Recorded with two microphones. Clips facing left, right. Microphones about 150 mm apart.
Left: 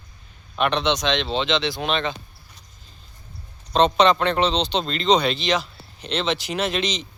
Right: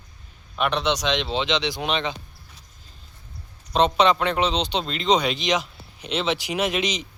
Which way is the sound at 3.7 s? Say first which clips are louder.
Left 2 dB; 5° right (ahead or behind).